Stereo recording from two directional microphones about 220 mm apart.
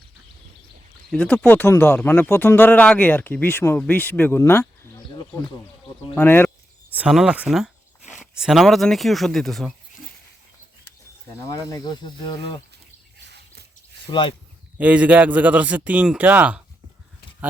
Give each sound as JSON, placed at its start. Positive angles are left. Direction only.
{"t": 1.1, "sound": "speech", "side_deg": 5}
{"t": 6.9, "sound": "speech", "side_deg": -5}
{"t": 11.7, "sound": "speech", "side_deg": 20}
{"t": 13.2, "sound": "a sound", "side_deg": -50}
{"t": 14.1, "sound": "speech", "side_deg": 20}
{"t": 14.8, "sound": "a man's voice", "side_deg": -5}